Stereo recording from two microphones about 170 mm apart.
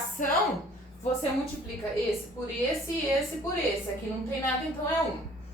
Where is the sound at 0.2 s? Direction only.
50° left (ahead or behind).